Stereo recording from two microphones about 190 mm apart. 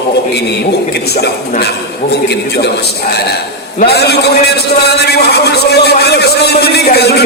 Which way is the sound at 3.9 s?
60° left (ahead or behind).